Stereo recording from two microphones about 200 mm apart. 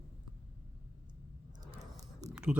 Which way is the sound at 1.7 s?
15° right (ahead or behind).